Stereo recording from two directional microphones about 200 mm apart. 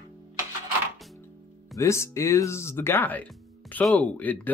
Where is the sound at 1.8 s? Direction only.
15° left (ahead or behind).